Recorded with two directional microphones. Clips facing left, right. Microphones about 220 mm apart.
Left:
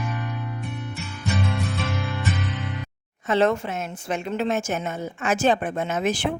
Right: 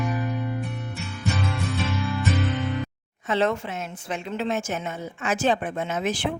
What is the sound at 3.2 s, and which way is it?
A woman's voice, 45° left (ahead or behind).